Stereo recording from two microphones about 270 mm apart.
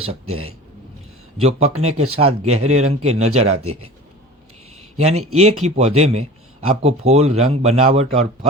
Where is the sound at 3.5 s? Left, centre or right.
Right.